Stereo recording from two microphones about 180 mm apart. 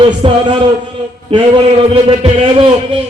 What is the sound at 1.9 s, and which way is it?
Speech, 30° right (ahead or behind).